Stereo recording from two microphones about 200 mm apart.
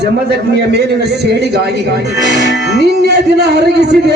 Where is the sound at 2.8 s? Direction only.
55° right (ahead or behind).